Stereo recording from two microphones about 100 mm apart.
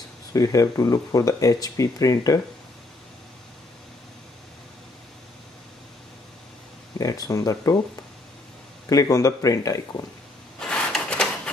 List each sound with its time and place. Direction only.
0.3 s speech: 35° left (ahead or behind)
7.0 s speech: 35° left (ahead or behind)
8.8 s speech: 35° left (ahead or behind)
10.6 s a sound: 10° left (ahead or behind)